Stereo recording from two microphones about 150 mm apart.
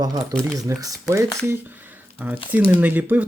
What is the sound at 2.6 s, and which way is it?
Speech, 10° right (ahead or behind).